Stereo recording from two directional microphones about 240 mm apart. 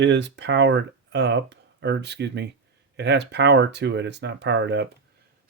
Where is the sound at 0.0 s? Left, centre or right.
Right.